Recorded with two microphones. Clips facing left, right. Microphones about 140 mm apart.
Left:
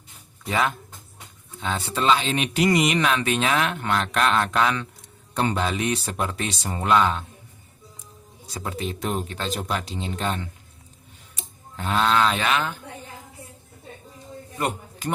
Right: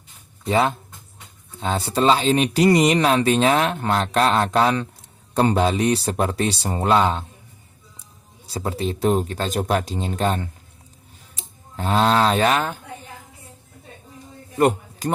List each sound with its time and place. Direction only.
0.4 s speech: 30° right (ahead or behind)
8.4 s speech: 35° right (ahead or behind)
11.8 s speech: 35° right (ahead or behind)
14.6 s a sound: 40° right (ahead or behind)